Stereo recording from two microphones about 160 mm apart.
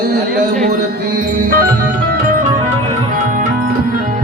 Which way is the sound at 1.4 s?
65° right (ahead or behind).